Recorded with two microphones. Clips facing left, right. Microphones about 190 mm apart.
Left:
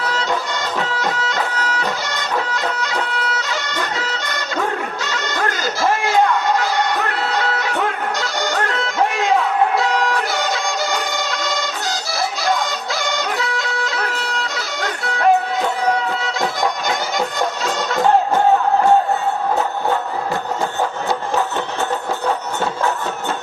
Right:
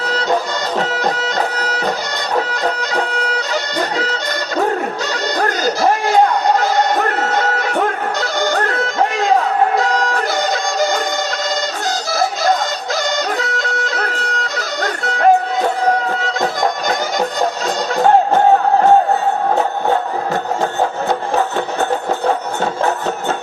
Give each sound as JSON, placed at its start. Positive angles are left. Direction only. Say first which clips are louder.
{"t": 0.1, "sound": "music", "louder": "right 8 dB", "side_deg": -40}
{"t": 5.1, "sound": "music", "louder": "right 3 dB", "side_deg": -40}
{"t": 12.4, "sound": "fowl", "louder": "right 3 dB", "side_deg": -40}
{"t": 13.4, "sound": "music", "louder": "right 2 dB", "side_deg": -45}